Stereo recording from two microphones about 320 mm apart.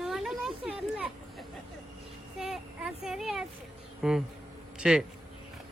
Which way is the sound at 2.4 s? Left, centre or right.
Centre.